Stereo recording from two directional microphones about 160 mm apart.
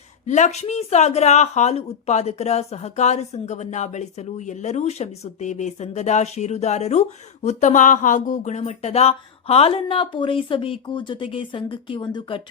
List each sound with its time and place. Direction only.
0.3 s a woman's voice: 50° left (ahead or behind); by 12.4 s 25° left (ahead or behind)